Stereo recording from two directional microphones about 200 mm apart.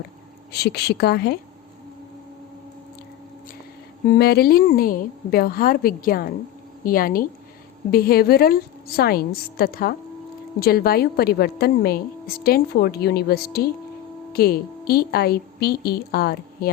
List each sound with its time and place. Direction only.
0.5 s a woman's voice: 55° left (ahead or behind)
4.1 s a woman's voice: 50° left (ahead or behind)